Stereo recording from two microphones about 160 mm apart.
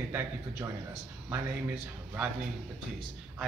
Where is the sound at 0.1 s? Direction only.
15° right (ahead or behind).